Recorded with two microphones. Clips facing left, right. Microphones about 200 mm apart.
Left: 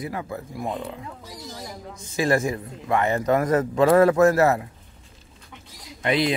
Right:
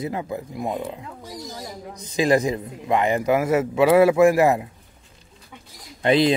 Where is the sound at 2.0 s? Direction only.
15° right (ahead or behind).